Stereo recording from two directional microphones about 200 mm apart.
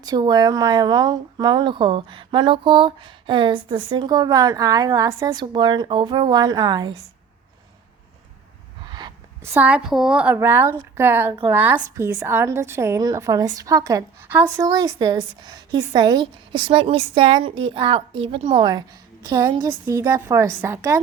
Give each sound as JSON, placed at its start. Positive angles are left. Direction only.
{"t": 0.0, "sound": "speech", "side_deg": -20}
{"t": 8.9, "sound": "a woman's voice", "side_deg": -20}